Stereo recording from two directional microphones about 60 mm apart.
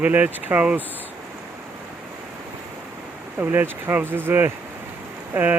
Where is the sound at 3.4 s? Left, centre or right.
Right.